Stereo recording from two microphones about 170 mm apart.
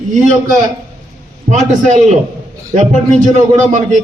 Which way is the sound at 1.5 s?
45° right (ahead or behind).